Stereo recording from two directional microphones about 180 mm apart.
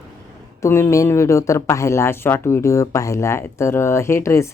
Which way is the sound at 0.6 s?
15° left (ahead or behind).